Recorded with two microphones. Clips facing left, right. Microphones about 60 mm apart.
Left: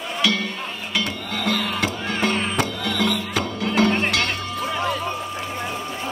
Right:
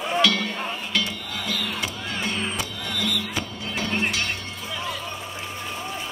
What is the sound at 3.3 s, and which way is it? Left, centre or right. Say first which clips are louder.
Cowbell: left 6 dB; left.